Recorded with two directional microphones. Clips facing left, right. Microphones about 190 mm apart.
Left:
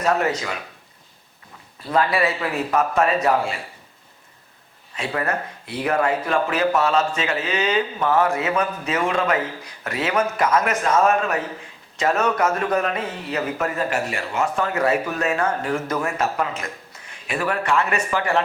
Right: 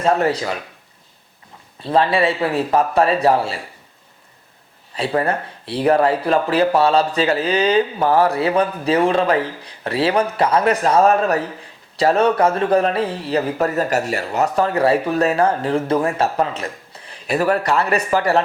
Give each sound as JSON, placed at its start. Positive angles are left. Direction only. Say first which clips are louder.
{"t": 0.0, "sound": "speech", "louder": "right 4 dB", "side_deg": -30}
{"t": 1.8, "sound": "speech", "louder": "right 4 dB", "side_deg": -30}
{"t": 4.9, "sound": "speech", "louder": "right 5 dB", "side_deg": -30}